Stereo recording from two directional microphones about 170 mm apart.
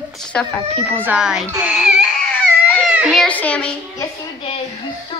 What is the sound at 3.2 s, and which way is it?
Speech, 10° left (ahead or behind).